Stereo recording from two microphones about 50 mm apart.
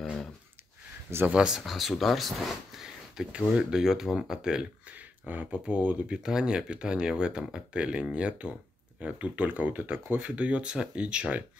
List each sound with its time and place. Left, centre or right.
1.3 s speech: centre
1.6 s speech: centre
3.3 s speech: centre
4.8 s a sound: right
5.7 s speech: right
6.1 s speech: centre